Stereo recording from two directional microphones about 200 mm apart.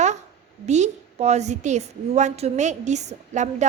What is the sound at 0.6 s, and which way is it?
A woman's voice, 35° right (ahead or behind).